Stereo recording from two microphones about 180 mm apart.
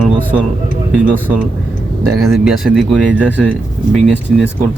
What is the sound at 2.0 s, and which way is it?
Speech, 15° right (ahead or behind).